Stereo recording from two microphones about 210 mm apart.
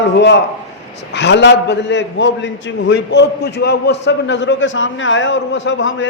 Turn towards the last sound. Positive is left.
turn(degrees=65)  # may be behind; listen again after turning